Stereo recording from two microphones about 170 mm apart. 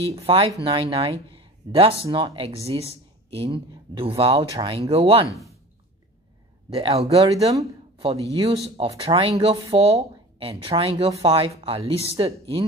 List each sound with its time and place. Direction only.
0.0 s speech: 35° right (ahead or behind)
6.7 s speech: 35° right (ahead or behind)